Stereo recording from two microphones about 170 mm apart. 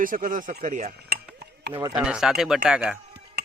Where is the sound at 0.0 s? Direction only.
55° right (ahead or behind).